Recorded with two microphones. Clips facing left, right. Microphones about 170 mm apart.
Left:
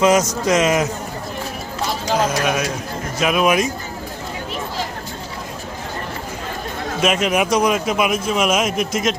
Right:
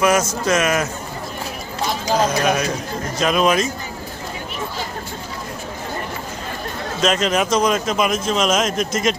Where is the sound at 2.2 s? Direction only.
5° left (ahead or behind).